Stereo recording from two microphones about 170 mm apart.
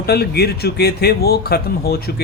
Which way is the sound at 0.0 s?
65° left (ahead or behind).